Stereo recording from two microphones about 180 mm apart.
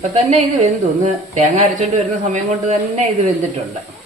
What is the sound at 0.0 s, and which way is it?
A woman's voice, 40° right (ahead or behind).